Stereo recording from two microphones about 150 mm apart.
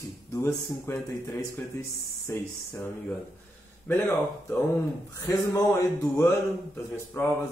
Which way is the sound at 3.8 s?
10° left (ahead or behind).